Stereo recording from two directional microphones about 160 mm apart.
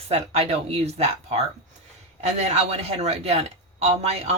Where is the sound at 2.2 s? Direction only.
45° right (ahead or behind).